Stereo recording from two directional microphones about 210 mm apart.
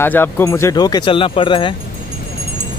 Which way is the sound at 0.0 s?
10° left (ahead or behind).